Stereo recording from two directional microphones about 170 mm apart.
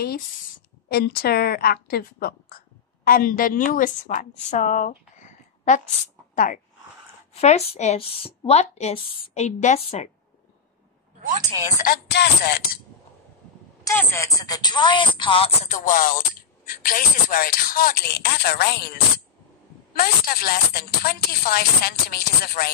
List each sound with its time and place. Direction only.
0.8 s a woman's voice: 65° left (ahead or behind)
7.3 s a woman's voice: 40° left (ahead or behind)
11.6 s speech: 55° left (ahead or behind)
12.1 s speech: 75° left (ahead or behind)
13.8 s speech: 15° left (ahead or behind); by 22.7 s 60° left (ahead or behind)